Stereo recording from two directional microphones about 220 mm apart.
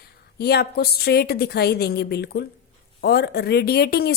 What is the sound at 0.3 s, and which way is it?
Speech, 45° left (ahead or behind).